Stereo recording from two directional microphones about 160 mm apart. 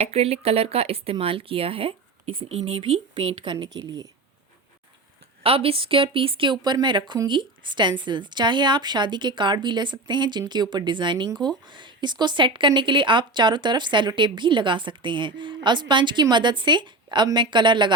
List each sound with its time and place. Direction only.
0.0 s speech: 40° right (ahead or behind); by 4.1 s 25° right (ahead or behind)
5.4 s speech: 35° right (ahead or behind)